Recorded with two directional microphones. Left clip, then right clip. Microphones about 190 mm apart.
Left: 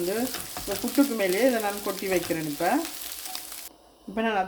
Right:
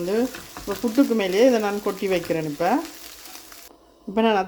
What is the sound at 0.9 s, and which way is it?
Speech, 55° right (ahead or behind).